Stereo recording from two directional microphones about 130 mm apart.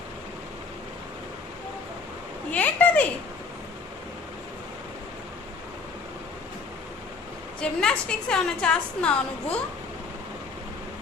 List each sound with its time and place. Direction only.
2.5 s speech: 10° left (ahead or behind)
7.6 s a woman's voice: 5° left (ahead or behind)